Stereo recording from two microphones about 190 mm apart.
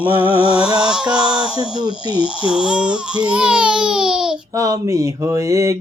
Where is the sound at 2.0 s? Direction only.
20° right (ahead or behind).